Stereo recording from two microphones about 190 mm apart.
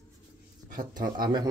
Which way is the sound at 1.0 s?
45° right (ahead or behind).